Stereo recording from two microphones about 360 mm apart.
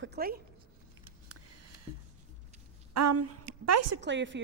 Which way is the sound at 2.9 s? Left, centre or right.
Right.